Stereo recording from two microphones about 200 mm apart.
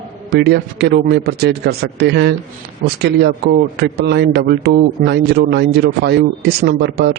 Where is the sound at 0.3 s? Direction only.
55° right (ahead or behind).